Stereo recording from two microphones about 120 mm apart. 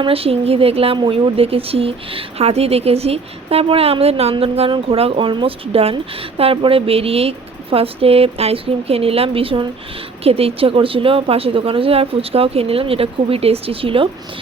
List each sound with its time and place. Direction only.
0.0 s speech: 55° right (ahead or behind)